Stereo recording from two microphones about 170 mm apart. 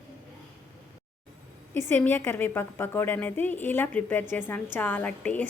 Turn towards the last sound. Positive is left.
turn(degrees=10)  # may be behind; listen again after turning